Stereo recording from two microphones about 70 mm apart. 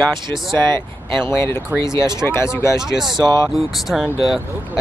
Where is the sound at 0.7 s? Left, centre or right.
Left.